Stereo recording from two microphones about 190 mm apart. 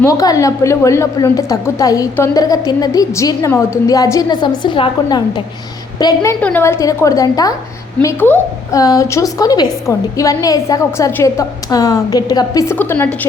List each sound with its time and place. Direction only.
0.0 s a woman's voice: 20° left (ahead or behind)